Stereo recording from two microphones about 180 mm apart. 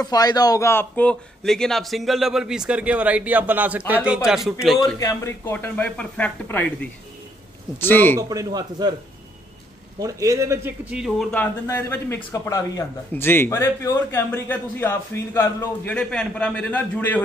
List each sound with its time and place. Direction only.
0.0 s a man's voice: 20° left (ahead or behind); by 4.9 s centre (ahead or behind)
4.9 s a man's voice: 15° left (ahead or behind)
8.2 s a man's voice: 20° right (ahead or behind)
9.9 s a man's voice: 20° right (ahead or behind); by 11.2 s centre (ahead or behind)
11.3 s a man's voice: 10° left (ahead or behind)